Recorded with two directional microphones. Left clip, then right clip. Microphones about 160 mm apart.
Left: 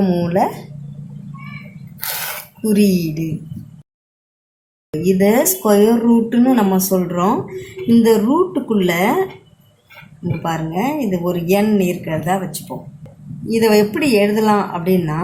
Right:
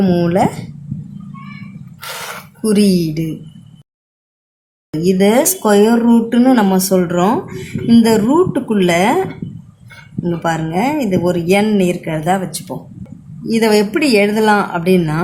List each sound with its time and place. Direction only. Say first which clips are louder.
0.0 s speech: right 3 dB; 35° right (ahead or behind)
2.6 s speech: right 2 dB; 35° right (ahead or behind)
4.9 s speech: right 2 dB; 40° right (ahead or behind)
10.4 s speech: right 3 dB; 45° right (ahead or behind)